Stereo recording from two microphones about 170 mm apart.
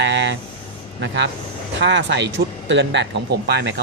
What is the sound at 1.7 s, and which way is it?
Speech, 90° right.